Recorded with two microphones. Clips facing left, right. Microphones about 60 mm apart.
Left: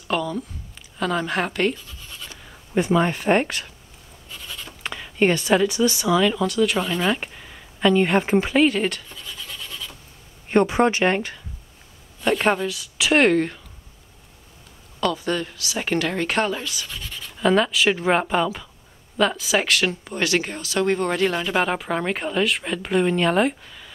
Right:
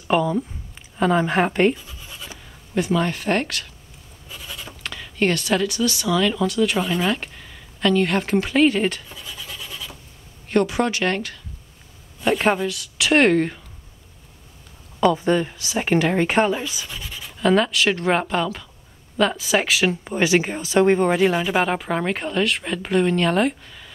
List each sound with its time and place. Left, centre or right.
0.1 s speech: centre
2.7 s speech: centre
4.3 s writing: centre
4.8 s speech: centre
7.2 s a sound: centre
10.5 s speech: left
12.2 s speech: centre
15.0 s speech: centre